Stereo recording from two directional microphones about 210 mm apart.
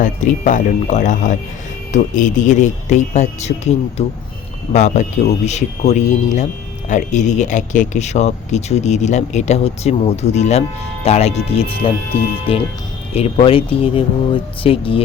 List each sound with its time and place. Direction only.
0.0 s speech: 35° left (ahead or behind)